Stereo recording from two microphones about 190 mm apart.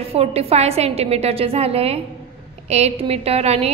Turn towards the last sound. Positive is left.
turn(degrees=-30)  # may be behind; listen again after turning